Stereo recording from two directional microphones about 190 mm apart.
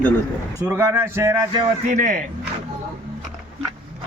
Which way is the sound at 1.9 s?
45° right (ahead or behind).